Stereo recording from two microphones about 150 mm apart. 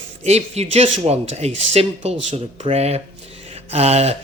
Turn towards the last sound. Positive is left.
turn(degrees=-45)  # may be behind; listen again after turning